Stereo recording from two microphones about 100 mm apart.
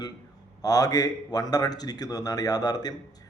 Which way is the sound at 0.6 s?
35° left (ahead or behind).